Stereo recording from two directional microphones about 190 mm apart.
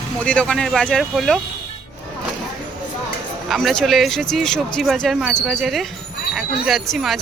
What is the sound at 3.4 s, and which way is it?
Speech, centre (ahead or behind).